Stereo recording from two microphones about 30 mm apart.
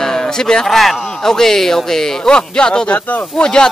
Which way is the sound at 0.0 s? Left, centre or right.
Centre.